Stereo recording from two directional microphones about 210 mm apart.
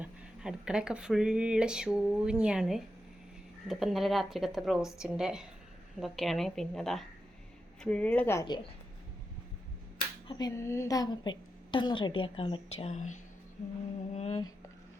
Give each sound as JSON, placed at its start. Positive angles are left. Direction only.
{"t": 0.0, "sound": "a woman's voice", "side_deg": -5}
{"t": 10.2, "sound": "a woman's voice", "side_deg": 20}